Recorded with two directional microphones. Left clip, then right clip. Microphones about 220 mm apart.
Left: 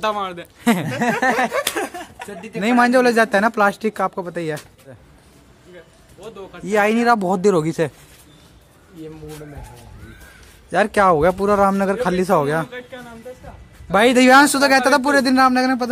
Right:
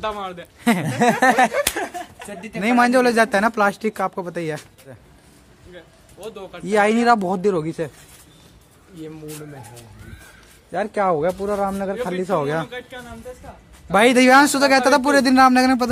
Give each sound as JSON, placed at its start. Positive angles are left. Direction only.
{"t": 0.0, "sound": "speech", "side_deg": 50}
{"t": 0.6, "sound": "speech", "side_deg": 0}
{"t": 0.8, "sound": "speech", "side_deg": -40}
{"t": 1.7, "sound": "speech", "side_deg": 45}
{"t": 2.2, "sound": "speech", "side_deg": -25}
{"t": 2.6, "sound": "speech", "side_deg": 0}
{"t": 6.2, "sound": "speech", "side_deg": -45}
{"t": 6.6, "sound": "speech", "side_deg": 0}
{"t": 7.2, "sound": "speech", "side_deg": 15}
{"t": 10.7, "sound": "a man's voice", "side_deg": 20}
{"t": 12.3, "sound": "speech", "side_deg": 10}
{"t": 12.6, "sound": "speech", "side_deg": -50}
{"t": 13.9, "sound": "speech", "side_deg": 0}